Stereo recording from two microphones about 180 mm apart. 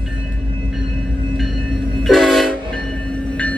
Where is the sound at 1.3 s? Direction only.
Centre (ahead or behind).